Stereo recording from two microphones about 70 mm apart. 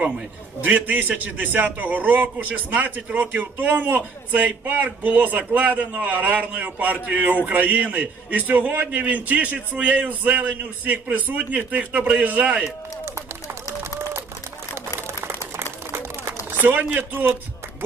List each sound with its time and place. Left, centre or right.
0.6 s a man's voice: right
15.2 s a sound: right
16.5 s speech: right